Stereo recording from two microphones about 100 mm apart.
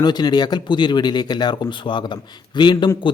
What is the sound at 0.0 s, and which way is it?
Speech, 45° left (ahead or behind).